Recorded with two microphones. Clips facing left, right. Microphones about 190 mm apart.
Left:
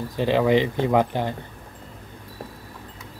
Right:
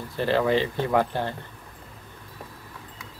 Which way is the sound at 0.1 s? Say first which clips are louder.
Left 3 dB; 15° left (ahead or behind).